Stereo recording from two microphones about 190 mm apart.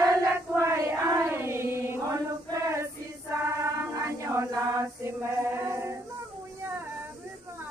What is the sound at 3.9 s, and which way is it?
Choir, 15° right (ahead or behind).